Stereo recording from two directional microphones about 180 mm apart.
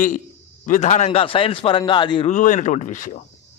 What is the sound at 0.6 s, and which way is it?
A man's voice, 45° left (ahead or behind).